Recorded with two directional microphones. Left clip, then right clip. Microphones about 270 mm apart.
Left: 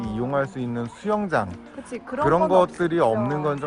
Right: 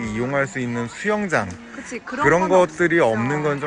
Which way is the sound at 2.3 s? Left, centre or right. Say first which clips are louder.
Right 2 dB; centre.